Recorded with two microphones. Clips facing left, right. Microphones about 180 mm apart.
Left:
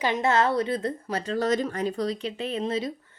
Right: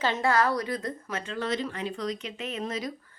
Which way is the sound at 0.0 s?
20° left (ahead or behind).